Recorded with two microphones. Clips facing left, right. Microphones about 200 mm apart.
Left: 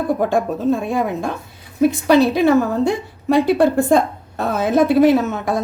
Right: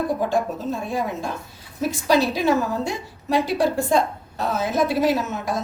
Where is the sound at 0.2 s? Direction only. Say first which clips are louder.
Left 5 dB; 55° left (ahead or behind).